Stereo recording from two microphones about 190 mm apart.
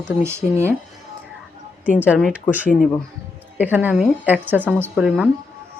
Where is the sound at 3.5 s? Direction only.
10° right (ahead or behind).